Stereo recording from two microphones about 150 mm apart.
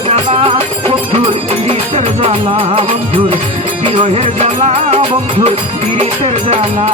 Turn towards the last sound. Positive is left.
turn(degrees=-45)  # may be behind; listen again after turning